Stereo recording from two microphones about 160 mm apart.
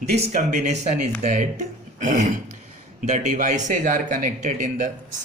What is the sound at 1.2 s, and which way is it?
Speech, 45° right (ahead or behind).